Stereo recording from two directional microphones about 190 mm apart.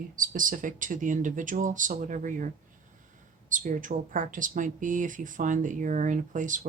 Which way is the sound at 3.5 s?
45° right (ahead or behind).